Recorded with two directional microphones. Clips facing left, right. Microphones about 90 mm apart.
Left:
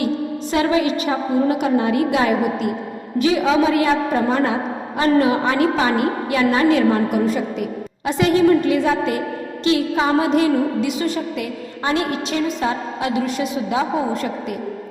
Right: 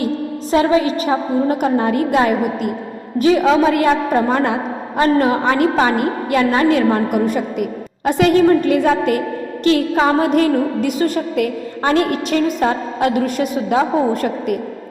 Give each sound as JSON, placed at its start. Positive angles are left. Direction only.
{"t": 0.5, "sound": "a woman's voice", "side_deg": -35}
{"t": 4.9, "sound": "a woman's voice", "side_deg": -50}